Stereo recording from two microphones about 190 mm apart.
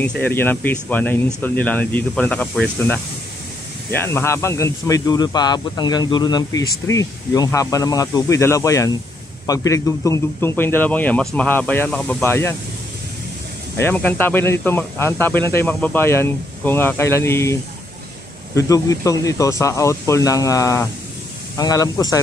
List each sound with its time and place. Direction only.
0.0 s speech: 10° left (ahead or behind)
3.9 s speech: 15° left (ahead or behind)
13.7 s speech: 10° left (ahead or behind)